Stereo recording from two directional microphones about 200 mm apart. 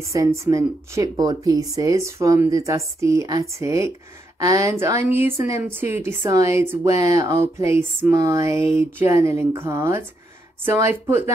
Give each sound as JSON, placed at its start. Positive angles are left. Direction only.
{"t": 0.1, "sound": "speech", "side_deg": -15}